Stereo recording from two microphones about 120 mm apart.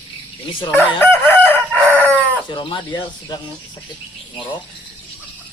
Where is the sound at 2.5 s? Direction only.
40° left (ahead or behind).